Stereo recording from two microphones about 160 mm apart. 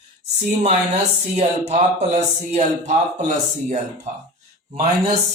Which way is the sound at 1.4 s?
45° right (ahead or behind).